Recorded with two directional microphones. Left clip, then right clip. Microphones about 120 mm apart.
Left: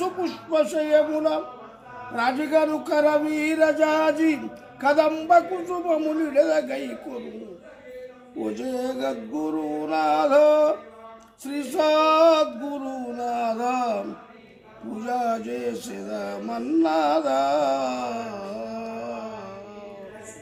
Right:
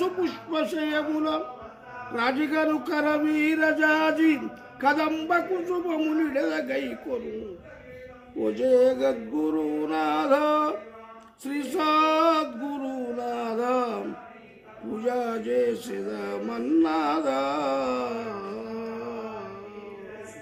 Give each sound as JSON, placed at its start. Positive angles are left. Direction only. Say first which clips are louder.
{"t": 0.0, "sound": "music", "louder": "even", "side_deg": 20}
{"t": 8.5, "sound": "music", "louder": "right 11 dB", "side_deg": 20}
{"t": 15.0, "sound": "music", "louder": "left 2 dB", "side_deg": 20}